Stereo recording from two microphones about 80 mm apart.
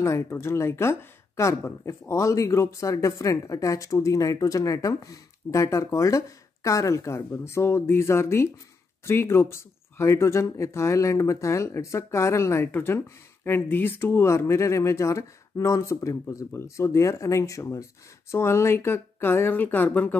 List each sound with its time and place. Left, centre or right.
0.0 s speech: left